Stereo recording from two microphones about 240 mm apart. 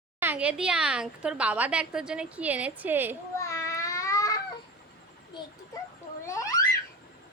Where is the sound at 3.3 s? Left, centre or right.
Centre.